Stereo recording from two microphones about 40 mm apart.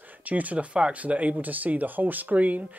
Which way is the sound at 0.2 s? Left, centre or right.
Right.